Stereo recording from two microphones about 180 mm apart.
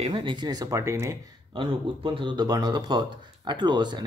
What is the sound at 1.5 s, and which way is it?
Speech, 25° right (ahead or behind).